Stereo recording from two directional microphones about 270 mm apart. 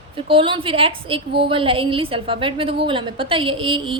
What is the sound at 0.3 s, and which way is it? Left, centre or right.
A woman's voice, centre.